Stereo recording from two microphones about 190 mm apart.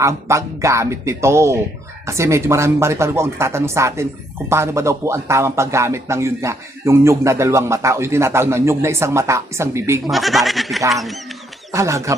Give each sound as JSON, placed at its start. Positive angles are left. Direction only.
{"t": 0.0, "sound": "speech", "side_deg": -15}
{"t": 10.1, "sound": "speech", "side_deg": 0}
{"t": 11.7, "sound": "speech", "side_deg": -15}